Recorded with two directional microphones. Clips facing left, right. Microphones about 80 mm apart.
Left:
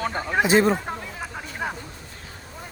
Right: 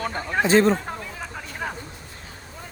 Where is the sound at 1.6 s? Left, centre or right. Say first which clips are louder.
Left 1 dB; centre.